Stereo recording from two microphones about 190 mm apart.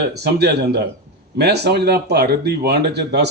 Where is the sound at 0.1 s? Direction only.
60° right (ahead or behind).